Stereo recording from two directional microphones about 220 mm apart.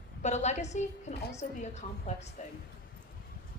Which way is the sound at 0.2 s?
30° left (ahead or behind).